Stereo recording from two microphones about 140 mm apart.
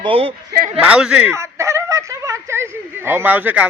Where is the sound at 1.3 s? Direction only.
20° right (ahead or behind).